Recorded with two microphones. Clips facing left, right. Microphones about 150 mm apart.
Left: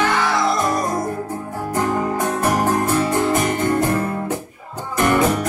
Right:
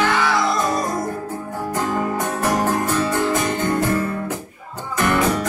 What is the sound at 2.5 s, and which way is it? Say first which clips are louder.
Music: left 1 dB; 15° left (ahead or behind).